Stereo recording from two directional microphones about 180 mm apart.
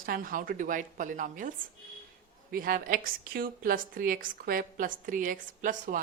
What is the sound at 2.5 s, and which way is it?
A woman's voice, 50° right (ahead or behind).